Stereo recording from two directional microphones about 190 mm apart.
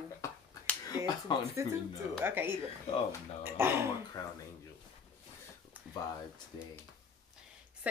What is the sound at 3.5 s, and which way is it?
Speech, 10° right (ahead or behind).